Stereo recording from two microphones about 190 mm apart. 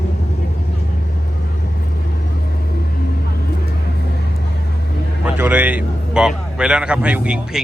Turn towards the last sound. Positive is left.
turn(degrees=-5)  # may be behind; listen again after turning